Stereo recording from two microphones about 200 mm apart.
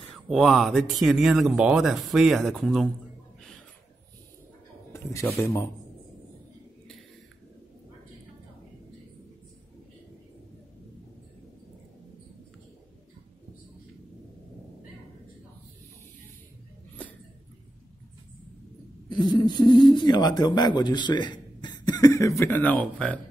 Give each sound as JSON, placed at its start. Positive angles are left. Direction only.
{"t": 0.3, "sound": "speech", "side_deg": 0}
{"t": 4.9, "sound": "speech", "side_deg": 15}
{"t": 19.0, "sound": "speech", "side_deg": 20}